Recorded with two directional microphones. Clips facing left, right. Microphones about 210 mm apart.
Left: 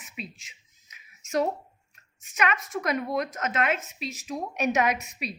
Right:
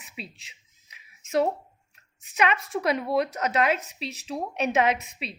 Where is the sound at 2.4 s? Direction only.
30° right (ahead or behind).